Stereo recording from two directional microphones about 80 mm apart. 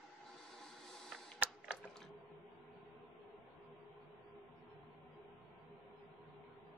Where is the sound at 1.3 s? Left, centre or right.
Centre.